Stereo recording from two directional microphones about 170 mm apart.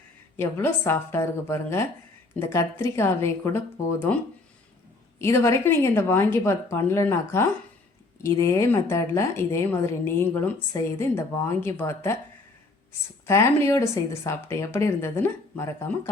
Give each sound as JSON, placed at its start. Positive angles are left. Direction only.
{"t": 0.3, "sound": "a woman's voice", "side_deg": 15}
{"t": 5.2, "sound": "a woman's voice", "side_deg": 15}
{"t": 13.2, "sound": "a woman's voice", "side_deg": 15}